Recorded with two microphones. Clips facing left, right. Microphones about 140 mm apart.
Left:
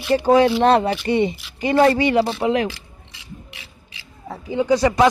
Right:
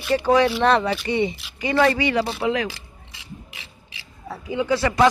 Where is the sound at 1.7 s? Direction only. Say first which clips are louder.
Left 4 dB; 35° left (ahead or behind).